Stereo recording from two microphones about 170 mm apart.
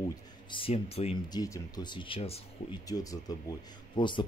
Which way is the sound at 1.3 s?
20° left (ahead or behind).